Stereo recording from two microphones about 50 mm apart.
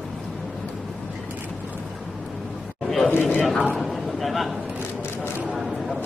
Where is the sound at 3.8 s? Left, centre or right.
Centre.